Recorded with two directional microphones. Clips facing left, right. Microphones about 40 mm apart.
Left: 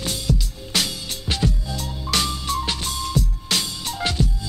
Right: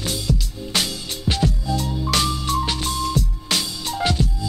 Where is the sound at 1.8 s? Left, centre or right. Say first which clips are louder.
Right 1 dB; centre.